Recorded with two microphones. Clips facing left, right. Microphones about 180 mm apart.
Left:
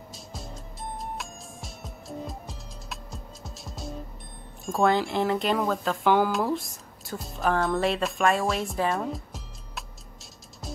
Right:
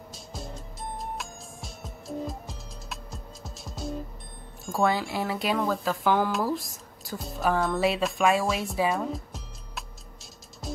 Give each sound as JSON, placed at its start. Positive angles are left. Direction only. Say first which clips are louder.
{"t": 0.1, "sound": "music", "louder": "right 2 dB", "side_deg": 0}
{"t": 4.6, "sound": "speech", "louder": "left 2 dB", "side_deg": 0}